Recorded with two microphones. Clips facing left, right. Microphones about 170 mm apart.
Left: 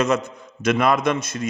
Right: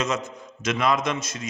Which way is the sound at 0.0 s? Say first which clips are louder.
Left 6 dB; 60° left (ahead or behind).